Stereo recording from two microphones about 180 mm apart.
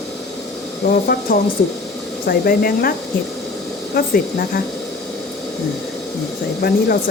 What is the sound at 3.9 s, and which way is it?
Speech, 55° left (ahead or behind).